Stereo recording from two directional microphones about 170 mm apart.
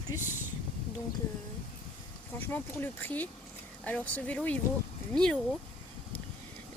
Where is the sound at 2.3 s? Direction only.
10° left (ahead or behind).